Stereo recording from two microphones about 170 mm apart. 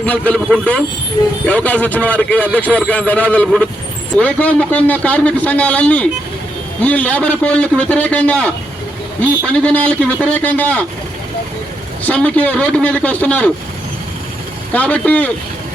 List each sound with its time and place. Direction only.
0.0 s a man's voice: 10° left (ahead or behind)
9.5 s a man's voice: 5° left (ahead or behind)
12.0 s a man's voice: 10° left (ahead or behind)
14.7 s a man's voice: 10° left (ahead or behind)